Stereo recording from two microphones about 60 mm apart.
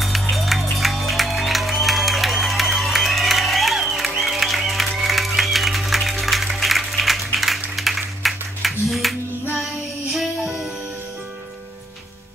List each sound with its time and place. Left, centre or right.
0.0 s music: centre
7.7 s a sound: centre
10.1 s music: centre